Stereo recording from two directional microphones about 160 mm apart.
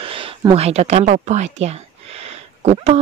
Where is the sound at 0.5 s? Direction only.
40° right (ahead or behind).